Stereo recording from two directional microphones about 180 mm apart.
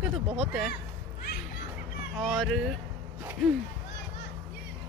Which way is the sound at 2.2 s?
Centre (ahead or behind).